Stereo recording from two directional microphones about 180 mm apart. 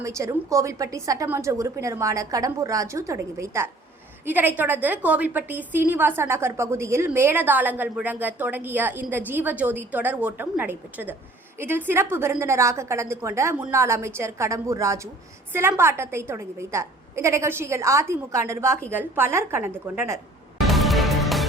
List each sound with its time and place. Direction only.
0.0 s a woman's voice: 15° right (ahead or behind)
20.7 s music: centre (ahead or behind)